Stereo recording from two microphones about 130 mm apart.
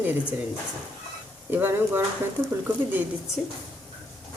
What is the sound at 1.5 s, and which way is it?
Speech, 15° right (ahead or behind).